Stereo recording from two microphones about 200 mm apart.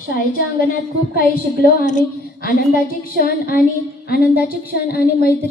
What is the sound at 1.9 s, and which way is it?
A woman's voice, 40° left (ahead or behind).